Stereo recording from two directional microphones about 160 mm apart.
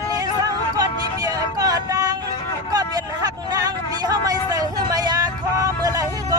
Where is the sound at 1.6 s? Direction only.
20° right (ahead or behind).